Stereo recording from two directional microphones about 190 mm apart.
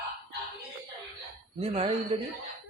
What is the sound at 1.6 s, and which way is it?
Speech, 35° right (ahead or behind).